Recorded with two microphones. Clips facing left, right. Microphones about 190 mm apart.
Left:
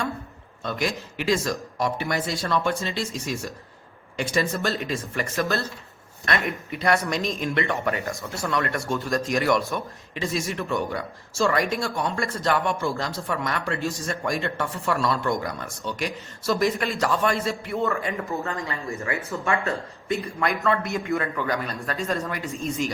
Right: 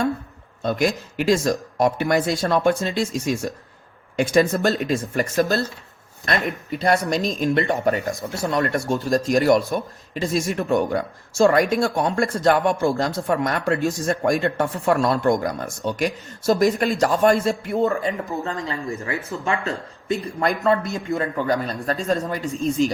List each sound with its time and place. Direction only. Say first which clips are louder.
0.6 s a man's voice: right 6 dB; 45° right (ahead or behind)